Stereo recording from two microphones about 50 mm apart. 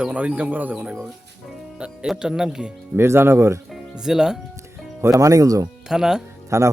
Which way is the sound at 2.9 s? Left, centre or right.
Right.